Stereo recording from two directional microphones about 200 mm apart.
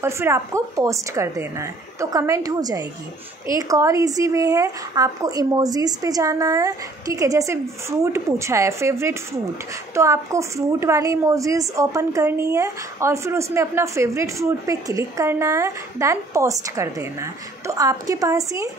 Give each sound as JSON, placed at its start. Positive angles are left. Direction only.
{"t": 0.0, "sound": "a woman's voice", "side_deg": -15}